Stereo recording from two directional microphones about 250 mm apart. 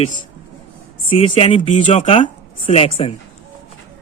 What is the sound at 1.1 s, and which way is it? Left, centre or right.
Speech, left.